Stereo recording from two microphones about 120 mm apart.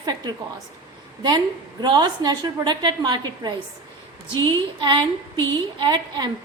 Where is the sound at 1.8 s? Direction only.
35° right (ahead or behind).